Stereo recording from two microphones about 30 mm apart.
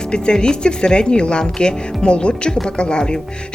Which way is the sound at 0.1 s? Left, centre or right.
Left.